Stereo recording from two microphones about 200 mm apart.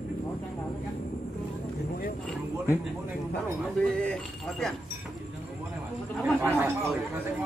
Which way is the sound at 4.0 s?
5° left (ahead or behind).